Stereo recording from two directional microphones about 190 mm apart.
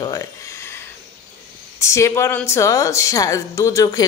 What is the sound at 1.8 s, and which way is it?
A woman's voice, 15° left (ahead or behind).